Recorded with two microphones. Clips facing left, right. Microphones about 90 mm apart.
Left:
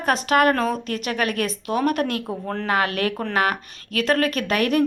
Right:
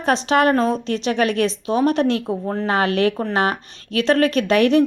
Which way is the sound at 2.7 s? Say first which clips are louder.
Right 4 dB; 30° right (ahead or behind).